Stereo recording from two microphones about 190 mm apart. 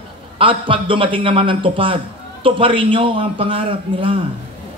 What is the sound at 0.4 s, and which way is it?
A man's voice, 25° right (ahead or behind).